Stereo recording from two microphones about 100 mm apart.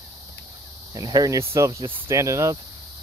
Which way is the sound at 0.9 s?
40° right (ahead or behind).